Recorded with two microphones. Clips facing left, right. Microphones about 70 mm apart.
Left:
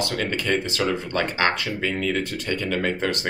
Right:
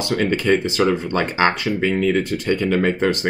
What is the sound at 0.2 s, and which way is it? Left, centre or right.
Speech, right.